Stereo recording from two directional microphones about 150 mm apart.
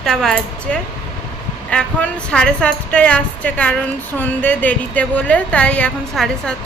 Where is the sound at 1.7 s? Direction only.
5° left (ahead or behind).